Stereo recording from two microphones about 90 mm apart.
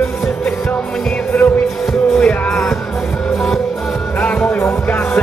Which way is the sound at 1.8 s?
10° left (ahead or behind).